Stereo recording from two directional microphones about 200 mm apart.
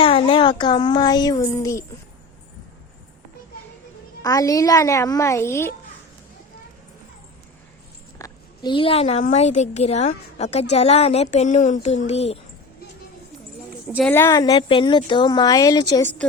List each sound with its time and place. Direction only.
0.0 s a child's voice: 25° left (ahead or behind)
4.2 s a woman's voice: 15° left (ahead or behind)
8.2 s a woman's voice: 25° left (ahead or behind)
14.1 s speech: 15° left (ahead or behind)